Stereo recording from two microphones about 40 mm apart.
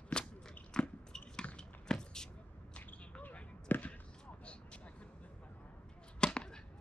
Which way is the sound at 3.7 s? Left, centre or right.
Left.